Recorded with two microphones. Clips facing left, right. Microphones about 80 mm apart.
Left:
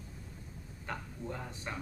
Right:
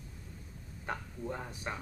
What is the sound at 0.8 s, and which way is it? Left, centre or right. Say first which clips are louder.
Speech: right 2 dB; centre.